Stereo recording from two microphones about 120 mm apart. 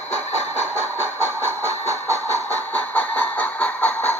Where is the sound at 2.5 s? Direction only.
15° left (ahead or behind).